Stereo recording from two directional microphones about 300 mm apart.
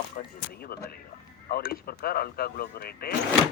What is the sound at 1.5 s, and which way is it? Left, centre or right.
Speech, left.